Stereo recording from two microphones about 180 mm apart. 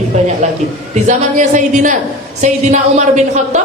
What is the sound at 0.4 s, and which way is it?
A woman's voice, 40° right (ahead or behind).